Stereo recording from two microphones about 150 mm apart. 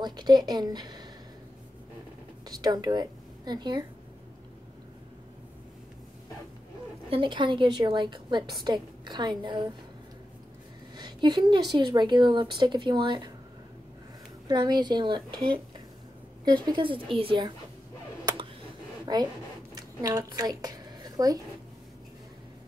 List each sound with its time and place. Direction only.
0.0 s a woman's voice: 30° right (ahead or behind)
2.4 s a woman's voice: 25° right (ahead or behind)
7.1 s a woman's voice: 35° right (ahead or behind)
11.0 s a woman's voice: 30° right (ahead or behind)
14.5 s a woman's voice: 30° right (ahead or behind)
16.4 s speech: 30° right (ahead or behind)
19.1 s a woman's voice: 30° right (ahead or behind)
19.7 s a sound: 25° right (ahead or behind)